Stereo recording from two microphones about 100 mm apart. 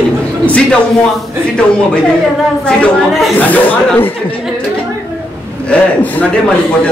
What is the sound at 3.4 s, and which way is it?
Speech, 15° left (ahead or behind).